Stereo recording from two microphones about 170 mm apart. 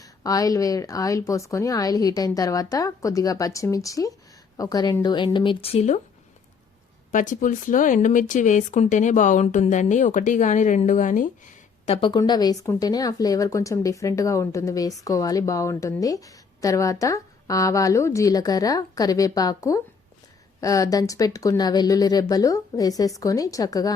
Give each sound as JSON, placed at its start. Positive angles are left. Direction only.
{"t": 0.0, "sound": "speech", "side_deg": 20}
{"t": 7.1, "sound": "speech", "side_deg": 50}
{"t": 11.9, "sound": "speech", "side_deg": 30}